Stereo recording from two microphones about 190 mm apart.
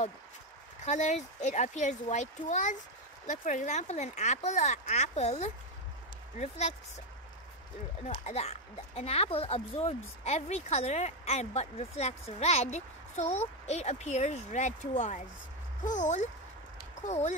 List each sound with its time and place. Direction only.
0.8 s speech: 40° left (ahead or behind)
8.1 s speech: 35° left (ahead or behind)